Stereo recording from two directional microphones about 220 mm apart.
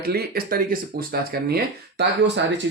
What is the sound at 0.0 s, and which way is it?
Speech, 45° right (ahead or behind).